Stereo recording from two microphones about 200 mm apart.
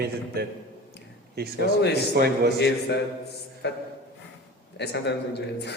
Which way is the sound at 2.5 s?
55° left (ahead or behind).